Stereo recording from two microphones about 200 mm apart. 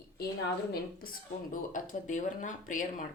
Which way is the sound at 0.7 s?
45° left (ahead or behind).